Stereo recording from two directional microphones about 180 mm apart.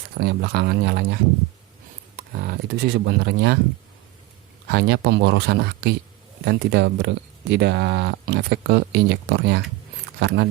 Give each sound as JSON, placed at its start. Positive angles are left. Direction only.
{"t": 0.2, "sound": "speech", "side_deg": -65}
{"t": 4.7, "sound": "speech", "side_deg": -65}